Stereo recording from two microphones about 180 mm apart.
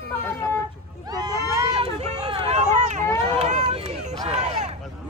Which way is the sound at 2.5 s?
40° right (ahead or behind).